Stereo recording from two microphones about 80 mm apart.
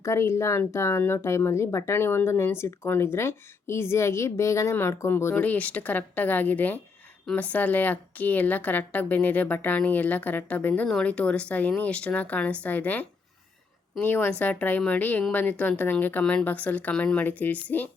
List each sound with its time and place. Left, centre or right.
0.0 s a woman's voice: left